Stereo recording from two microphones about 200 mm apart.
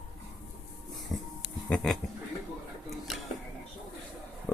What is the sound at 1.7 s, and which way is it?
Speech, 5° left (ahead or behind).